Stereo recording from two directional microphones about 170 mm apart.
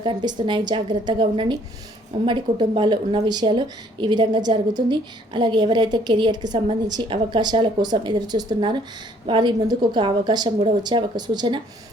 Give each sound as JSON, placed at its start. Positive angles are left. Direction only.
{"t": 0.0, "sound": "a woman's voice", "side_deg": -25}